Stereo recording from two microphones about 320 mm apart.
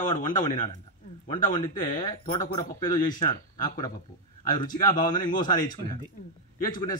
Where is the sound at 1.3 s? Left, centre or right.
Centre.